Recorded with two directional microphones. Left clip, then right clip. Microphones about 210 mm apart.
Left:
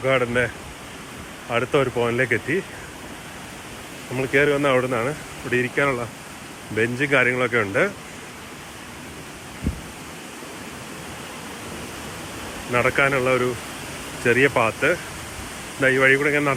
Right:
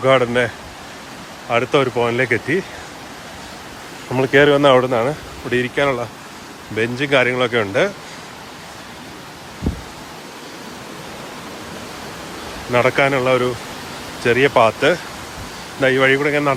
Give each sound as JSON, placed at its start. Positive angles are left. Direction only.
{"t": 0.0, "sound": "speech", "side_deg": -25}
{"t": 4.1, "sound": "speech", "side_deg": -30}
{"t": 12.7, "sound": "speech", "side_deg": -20}